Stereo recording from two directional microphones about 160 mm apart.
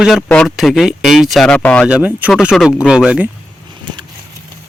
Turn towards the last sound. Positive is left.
turn(degrees=-5)  # may be behind; listen again after turning